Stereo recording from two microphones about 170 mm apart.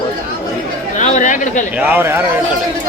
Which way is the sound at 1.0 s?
45° left (ahead or behind).